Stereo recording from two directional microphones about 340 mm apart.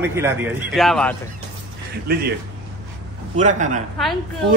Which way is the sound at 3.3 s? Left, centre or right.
Right.